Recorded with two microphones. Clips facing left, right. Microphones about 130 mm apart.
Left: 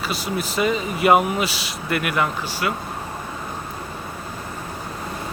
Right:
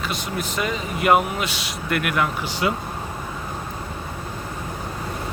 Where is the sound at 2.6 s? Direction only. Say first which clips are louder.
Right 2 dB; 20° right (ahead or behind).